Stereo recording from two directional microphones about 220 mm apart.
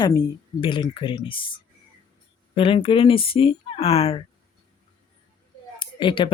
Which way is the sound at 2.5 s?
25° left (ahead or behind).